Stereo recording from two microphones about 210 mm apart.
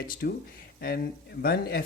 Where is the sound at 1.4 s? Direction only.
45° left (ahead or behind).